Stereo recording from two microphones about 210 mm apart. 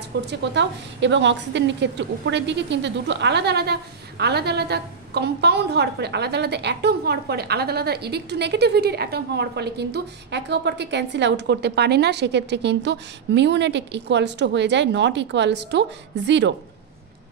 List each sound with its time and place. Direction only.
0.3 s a woman's voice: 55° right (ahead or behind)